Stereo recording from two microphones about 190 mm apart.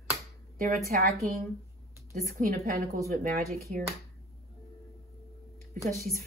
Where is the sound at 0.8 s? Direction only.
55° right (ahead or behind).